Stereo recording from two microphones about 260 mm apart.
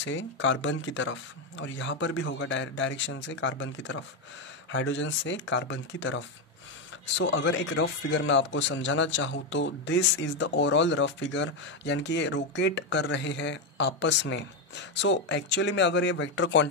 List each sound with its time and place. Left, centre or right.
0.0 s a man's voice: left